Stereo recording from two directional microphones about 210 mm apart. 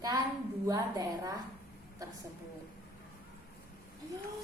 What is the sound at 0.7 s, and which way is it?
Speech, 15° right (ahead or behind).